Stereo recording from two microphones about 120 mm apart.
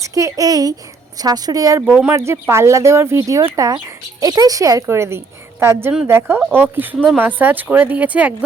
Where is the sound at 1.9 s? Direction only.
15° right (ahead or behind).